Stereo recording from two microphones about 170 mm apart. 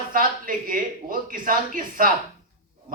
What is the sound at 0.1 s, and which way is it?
A man's voice, 55° right (ahead or behind).